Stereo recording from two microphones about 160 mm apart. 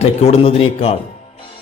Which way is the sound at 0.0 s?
40° left (ahead or behind).